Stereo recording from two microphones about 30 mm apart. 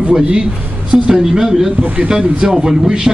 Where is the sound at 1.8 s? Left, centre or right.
Right.